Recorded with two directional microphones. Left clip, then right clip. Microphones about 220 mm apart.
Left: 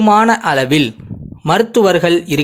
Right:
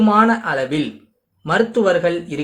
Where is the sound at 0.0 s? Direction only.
40° left (ahead or behind).